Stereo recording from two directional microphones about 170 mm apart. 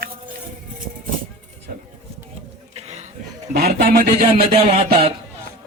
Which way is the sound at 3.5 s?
65° right (ahead or behind).